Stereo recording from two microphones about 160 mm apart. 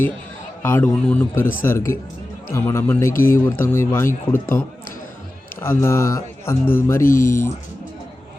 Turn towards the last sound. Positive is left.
turn(degrees=15)  # may be behind; listen again after turning